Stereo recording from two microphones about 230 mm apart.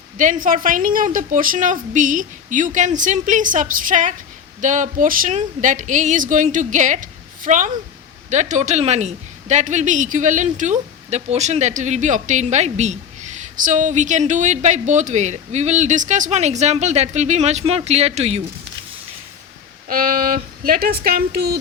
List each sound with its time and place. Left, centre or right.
0.2 s a woman's voice: right
19.9 s a woman's voice: right